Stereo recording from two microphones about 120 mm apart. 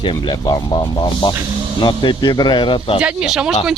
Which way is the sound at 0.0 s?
40° left (ahead or behind).